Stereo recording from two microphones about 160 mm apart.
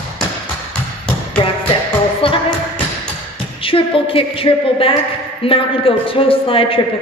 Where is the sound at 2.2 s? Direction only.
30° left (ahead or behind).